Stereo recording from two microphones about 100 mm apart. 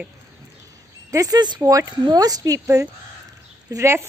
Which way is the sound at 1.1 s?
35° right (ahead or behind).